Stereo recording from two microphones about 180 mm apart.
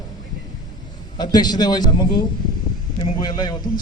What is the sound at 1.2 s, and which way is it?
A man's voice, 20° left (ahead or behind).